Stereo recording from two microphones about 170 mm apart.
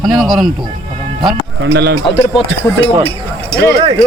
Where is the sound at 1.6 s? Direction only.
80° right.